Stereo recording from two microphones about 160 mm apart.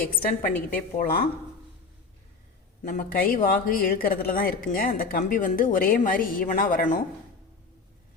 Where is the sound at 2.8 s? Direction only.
60° left (ahead or behind).